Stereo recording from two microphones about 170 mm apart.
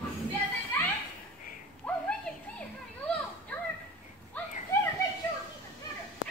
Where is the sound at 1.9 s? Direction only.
5° left (ahead or behind).